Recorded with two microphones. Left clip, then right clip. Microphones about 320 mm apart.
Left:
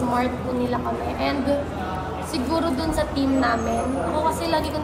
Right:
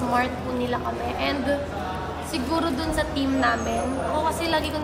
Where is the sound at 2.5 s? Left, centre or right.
Centre.